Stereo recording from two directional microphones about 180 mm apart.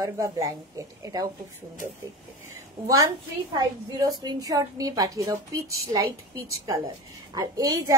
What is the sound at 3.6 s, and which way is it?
A woman's voice, 20° right (ahead or behind).